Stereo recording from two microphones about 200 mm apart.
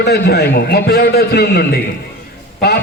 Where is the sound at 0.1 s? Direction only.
55° left (ahead or behind).